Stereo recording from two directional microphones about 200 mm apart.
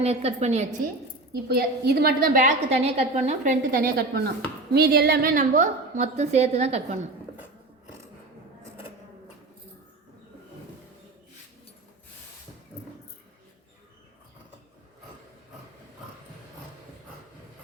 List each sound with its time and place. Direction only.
0.0 s a woman's voice: 30° right (ahead or behind)
1.3 s a woman's voice: 50° right (ahead or behind); by 7.0 s 30° right (ahead or behind)